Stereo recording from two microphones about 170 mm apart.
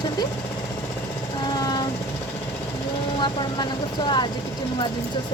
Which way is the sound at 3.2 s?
25° left (ahead or behind).